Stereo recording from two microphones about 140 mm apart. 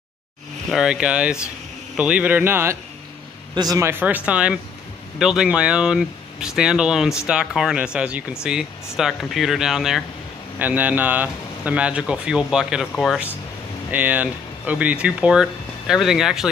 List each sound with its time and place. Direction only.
0.7 s speech: 5° right (ahead or behind)
3.5 s speech: 25° right (ahead or behind)
3.9 s speech: 10° right (ahead or behind)
13.8 s speech: 10° right (ahead or behind)